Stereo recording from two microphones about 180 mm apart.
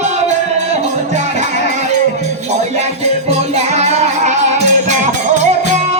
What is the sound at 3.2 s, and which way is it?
Music, 35° right (ahead or behind).